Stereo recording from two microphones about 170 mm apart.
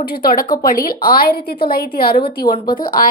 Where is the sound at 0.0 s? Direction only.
60° left (ahead or behind).